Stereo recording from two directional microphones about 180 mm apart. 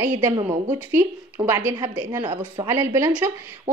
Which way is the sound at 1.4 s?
15° right (ahead or behind).